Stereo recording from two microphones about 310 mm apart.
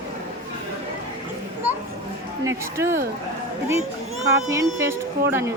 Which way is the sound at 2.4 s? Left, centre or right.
Centre.